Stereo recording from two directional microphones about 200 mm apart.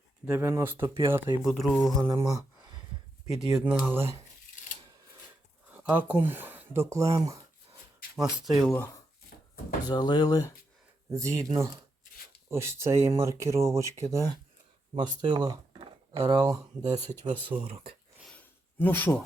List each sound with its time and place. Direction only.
0.3 s speech: 10° right (ahead or behind)
1.5 s speech: centre (ahead or behind)
2.0 s speech: 15° right (ahead or behind)
3.3 s speech: 5° right (ahead or behind)
5.7 s speech: 10° right (ahead or behind)
8.4 s speech: centre (ahead or behind)
8.7 s speech: 15° left (ahead or behind)
11.1 s speech: 15° right (ahead or behind)
18.8 s speech: 10° left (ahead or behind)